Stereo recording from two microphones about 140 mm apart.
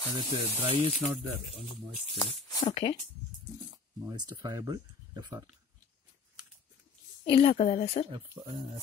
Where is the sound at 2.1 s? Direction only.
35° left (ahead or behind).